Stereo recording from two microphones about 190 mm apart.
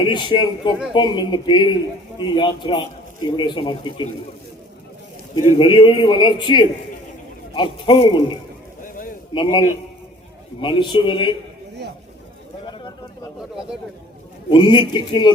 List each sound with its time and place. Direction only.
0.0 s a man's voice: 25° left (ahead or behind)
5.5 s a man's voice: 25° left (ahead or behind)
14.5 s a man's voice: 25° left (ahead or behind)